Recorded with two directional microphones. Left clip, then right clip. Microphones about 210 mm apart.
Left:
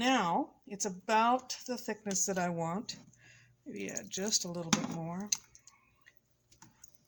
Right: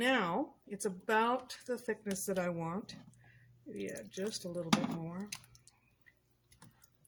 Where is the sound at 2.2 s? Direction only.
50° left (ahead or behind).